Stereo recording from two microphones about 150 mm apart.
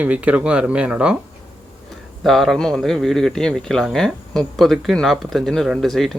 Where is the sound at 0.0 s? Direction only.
10° right (ahead or behind).